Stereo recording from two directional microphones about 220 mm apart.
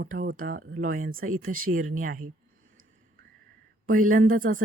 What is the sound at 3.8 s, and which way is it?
Speech, 40° right (ahead or behind).